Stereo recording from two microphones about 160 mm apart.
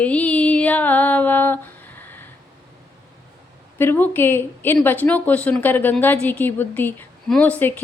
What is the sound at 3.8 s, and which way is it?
A woman's voice, 15° left (ahead or behind).